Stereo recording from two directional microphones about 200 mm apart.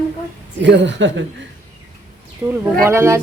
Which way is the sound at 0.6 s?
65° right (ahead or behind).